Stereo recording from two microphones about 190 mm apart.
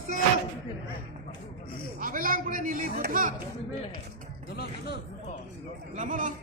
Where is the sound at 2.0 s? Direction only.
45° right (ahead or behind).